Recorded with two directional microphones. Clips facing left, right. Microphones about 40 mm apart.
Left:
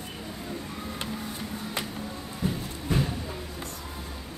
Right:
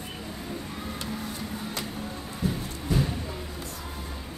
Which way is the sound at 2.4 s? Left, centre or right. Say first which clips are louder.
Even; left.